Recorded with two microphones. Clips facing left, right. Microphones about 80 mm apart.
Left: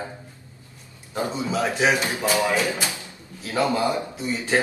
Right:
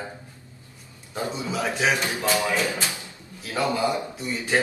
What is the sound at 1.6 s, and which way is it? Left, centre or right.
A man's voice, centre.